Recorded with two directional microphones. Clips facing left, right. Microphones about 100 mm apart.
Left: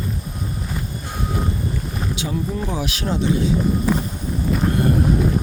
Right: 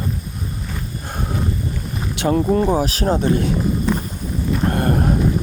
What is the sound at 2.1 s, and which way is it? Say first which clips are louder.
Speech: right 10 dB; 55° right (ahead or behind).